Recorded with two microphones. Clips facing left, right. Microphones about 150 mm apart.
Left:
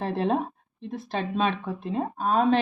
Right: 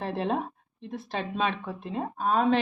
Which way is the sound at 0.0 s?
35° left (ahead or behind).